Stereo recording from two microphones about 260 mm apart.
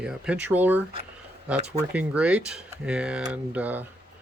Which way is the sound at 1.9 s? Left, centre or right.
Centre.